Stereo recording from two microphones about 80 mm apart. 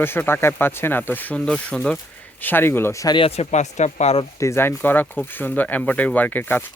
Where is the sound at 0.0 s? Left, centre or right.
Left.